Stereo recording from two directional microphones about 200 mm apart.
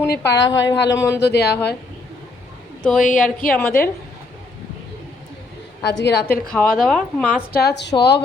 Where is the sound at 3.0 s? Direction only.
40° left (ahead or behind).